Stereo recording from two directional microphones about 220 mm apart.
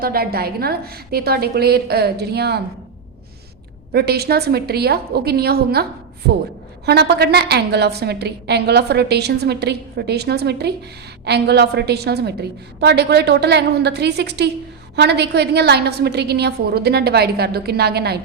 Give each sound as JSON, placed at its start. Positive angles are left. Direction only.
{"t": 0.0, "sound": "a woman's voice", "side_deg": -45}
{"t": 3.9, "sound": "a woman's voice", "side_deg": -45}